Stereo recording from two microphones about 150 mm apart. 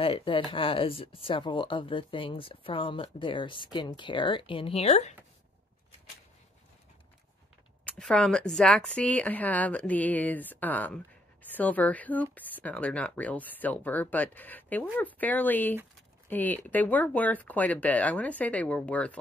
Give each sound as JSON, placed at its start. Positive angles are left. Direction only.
{"t": 0.0, "sound": "speech", "side_deg": 35}
{"t": 8.0, "sound": "speech", "side_deg": 5}